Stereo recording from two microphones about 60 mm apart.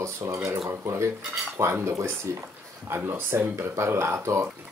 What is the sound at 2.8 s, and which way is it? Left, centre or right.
Speech, right.